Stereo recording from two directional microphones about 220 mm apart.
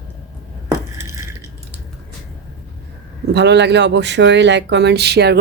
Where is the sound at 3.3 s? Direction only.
50° right (ahead or behind).